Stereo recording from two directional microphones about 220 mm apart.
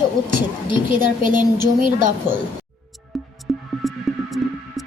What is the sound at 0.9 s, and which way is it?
Speech, 35° right (ahead or behind).